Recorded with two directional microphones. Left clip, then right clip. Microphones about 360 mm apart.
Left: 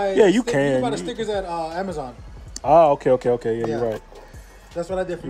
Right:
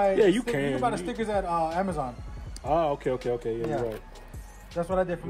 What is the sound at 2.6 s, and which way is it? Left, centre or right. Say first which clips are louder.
Speech: left 11 dB; centre.